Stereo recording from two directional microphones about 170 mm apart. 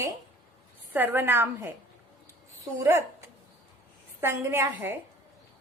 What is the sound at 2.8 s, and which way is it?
A woman's voice, 15° right (ahead or behind).